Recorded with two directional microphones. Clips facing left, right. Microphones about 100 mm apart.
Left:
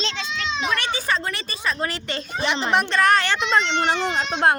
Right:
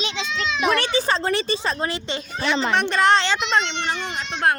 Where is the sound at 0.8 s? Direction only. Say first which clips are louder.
Right 3 dB; 30° right (ahead or behind).